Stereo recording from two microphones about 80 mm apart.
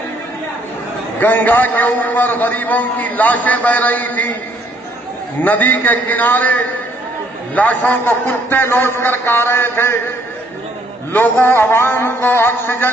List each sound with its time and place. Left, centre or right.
1.2 s a man's voice: left
5.4 s a man's voice: left
11.1 s a man's voice: left